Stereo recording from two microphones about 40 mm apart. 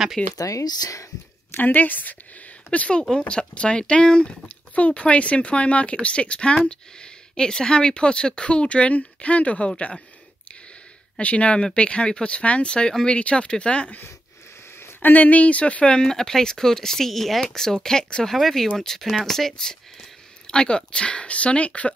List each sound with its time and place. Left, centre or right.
0.2 s speech: left
1.6 s a woman's voice: left
2.9 s speech: left
11.1 s speech: left
14.8 s a sound: left
15.1 s speech: left; by 18.3 s centre
18.3 s speech: centre; by 21.9 s left